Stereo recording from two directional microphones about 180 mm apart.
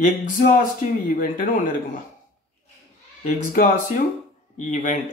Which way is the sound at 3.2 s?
45° left (ahead or behind).